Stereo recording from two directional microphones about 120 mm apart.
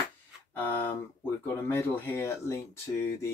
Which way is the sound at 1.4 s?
20° left (ahead or behind).